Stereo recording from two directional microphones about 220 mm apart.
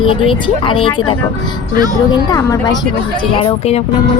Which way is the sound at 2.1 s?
15° left (ahead or behind).